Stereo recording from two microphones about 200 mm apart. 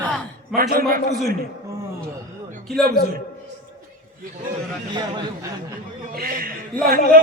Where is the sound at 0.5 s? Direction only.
45° right (ahead or behind).